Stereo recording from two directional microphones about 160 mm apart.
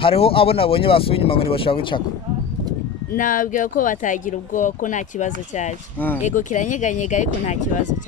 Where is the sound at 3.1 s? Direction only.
55° left (ahead or behind).